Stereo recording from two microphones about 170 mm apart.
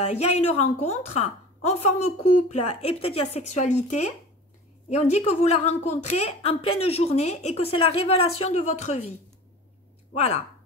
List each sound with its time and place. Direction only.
0.0 s a woman's voice: 40° left (ahead or behind)
10.1 s a woman's voice: 35° left (ahead or behind)